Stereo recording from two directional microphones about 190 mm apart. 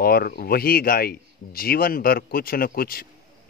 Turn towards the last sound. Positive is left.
turn(degrees=50)  # may be behind; listen again after turning